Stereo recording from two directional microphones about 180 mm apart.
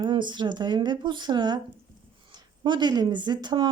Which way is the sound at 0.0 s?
25° right (ahead or behind).